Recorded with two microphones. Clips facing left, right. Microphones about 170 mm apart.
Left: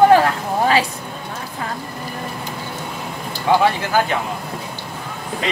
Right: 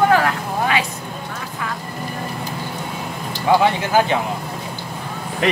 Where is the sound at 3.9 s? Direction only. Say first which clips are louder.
Right 2 dB; 20° right (ahead or behind).